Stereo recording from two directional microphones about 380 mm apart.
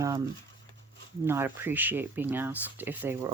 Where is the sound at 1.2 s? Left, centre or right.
Centre.